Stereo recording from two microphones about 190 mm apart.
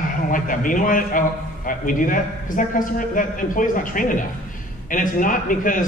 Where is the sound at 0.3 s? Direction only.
45° left (ahead or behind).